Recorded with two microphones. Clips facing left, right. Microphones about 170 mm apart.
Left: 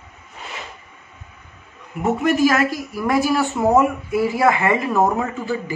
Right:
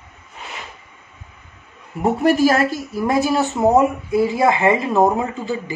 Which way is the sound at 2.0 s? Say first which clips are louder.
Right 2 dB; 30° right (ahead or behind).